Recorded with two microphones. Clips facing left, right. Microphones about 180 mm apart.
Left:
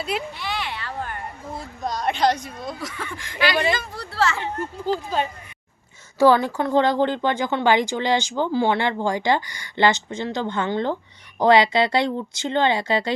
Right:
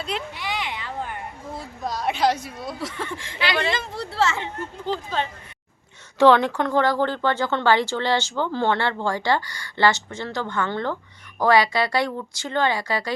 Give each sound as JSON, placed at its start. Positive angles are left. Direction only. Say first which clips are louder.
{"t": 0.3, "sound": "a sound", "louder": "even", "side_deg": -15}
{"t": 1.5, "sound": "a woman's voice", "louder": "left 1 dB", "side_deg": 0}
{"t": 3.2, "sound": "speech", "louder": "left 4 dB", "side_deg": -25}
{"t": 4.8, "sound": "speech", "louder": "left 3 dB", "side_deg": 10}
{"t": 6.1, "sound": "speech", "louder": "right 1 dB", "side_deg": 10}
{"t": 6.7, "sound": "speech", "louder": "left 3 dB", "side_deg": 20}